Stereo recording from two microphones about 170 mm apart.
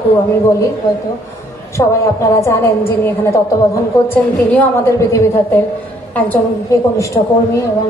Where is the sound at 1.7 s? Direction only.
20° left (ahead or behind).